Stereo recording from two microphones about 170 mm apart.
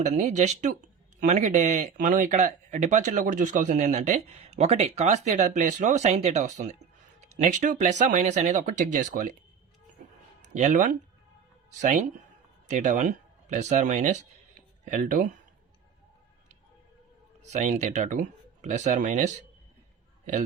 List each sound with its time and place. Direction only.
0.2 s speech: 40° right (ahead or behind)
10.4 s speech: 45° right (ahead or behind)
17.5 s speech: 45° right (ahead or behind)